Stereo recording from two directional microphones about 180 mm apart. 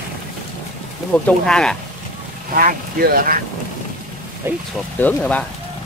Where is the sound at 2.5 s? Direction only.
50° right (ahead or behind).